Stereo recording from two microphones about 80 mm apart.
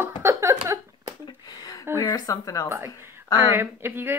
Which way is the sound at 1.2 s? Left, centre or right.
Left.